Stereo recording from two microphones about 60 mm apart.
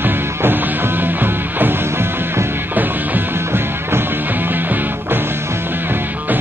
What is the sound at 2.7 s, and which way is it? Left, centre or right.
Music, right.